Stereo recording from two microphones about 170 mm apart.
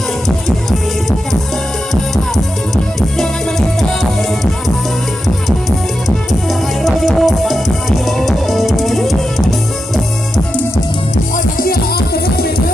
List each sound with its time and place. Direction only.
3.8 s music: centre (ahead or behind)
6.5 s music: centre (ahead or behind)
11.5 s music: 60° left (ahead or behind)